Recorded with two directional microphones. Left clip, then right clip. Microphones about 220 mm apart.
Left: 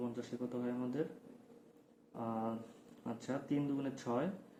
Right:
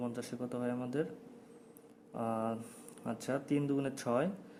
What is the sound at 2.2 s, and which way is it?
Speech, 55° right (ahead or behind).